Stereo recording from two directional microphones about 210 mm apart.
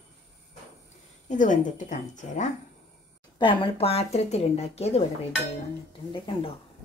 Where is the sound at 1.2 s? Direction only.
35° left (ahead or behind).